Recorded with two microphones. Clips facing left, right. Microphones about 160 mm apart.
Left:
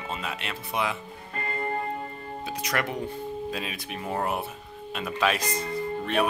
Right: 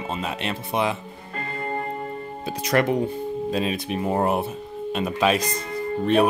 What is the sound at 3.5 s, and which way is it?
Speech, 30° right (ahead or behind).